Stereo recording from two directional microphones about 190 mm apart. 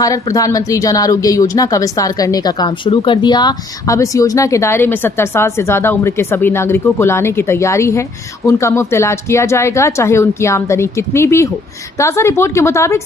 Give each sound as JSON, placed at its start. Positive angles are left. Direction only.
{"t": 0.0, "sound": "a woman's voice", "side_deg": 15}